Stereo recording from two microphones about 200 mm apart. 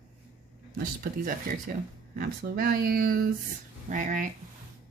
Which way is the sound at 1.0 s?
45° right (ahead or behind).